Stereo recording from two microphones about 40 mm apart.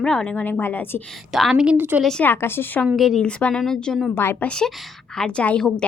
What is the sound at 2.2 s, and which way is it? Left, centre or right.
Speech, left.